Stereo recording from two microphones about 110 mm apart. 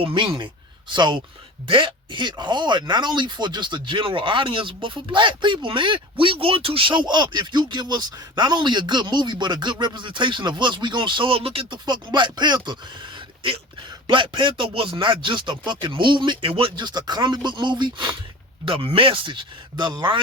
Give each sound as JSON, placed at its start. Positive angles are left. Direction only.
{"t": 0.0, "sound": "speech", "side_deg": -50}